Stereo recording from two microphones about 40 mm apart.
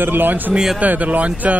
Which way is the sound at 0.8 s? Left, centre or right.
Right.